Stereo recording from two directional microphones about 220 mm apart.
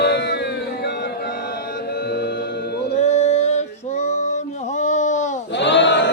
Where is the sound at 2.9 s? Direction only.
30° left (ahead or behind).